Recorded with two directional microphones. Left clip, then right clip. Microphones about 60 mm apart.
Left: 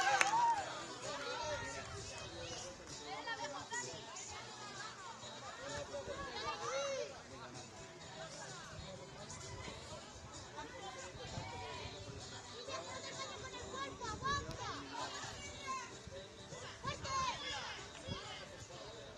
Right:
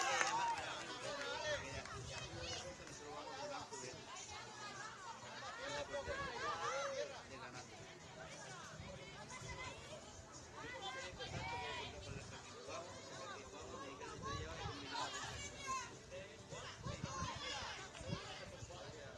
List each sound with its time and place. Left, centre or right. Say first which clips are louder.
0.0 s chatter: left 6 dB; right
1.7 s run: left 2 dB; right
3.4 s chatter: left 4 dB; right
5.6 s a sound: even; right
6.4 s chatter: left 2 dB; left
6.8 s a sound: left 3 dB; right
12.6 s chatter: left 5 dB; right
14.3 s children playing: left 7 dB; right
17.0 s run: left 9 dB; right
17.5 s a sound: left 2 dB; centre